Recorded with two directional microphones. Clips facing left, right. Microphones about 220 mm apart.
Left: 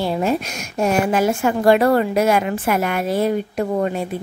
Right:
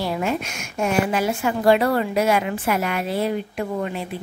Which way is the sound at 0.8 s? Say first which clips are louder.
Left 3 dB; 45° left (ahead or behind).